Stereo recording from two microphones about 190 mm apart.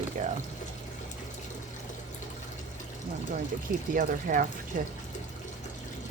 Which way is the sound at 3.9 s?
45° right (ahead or behind).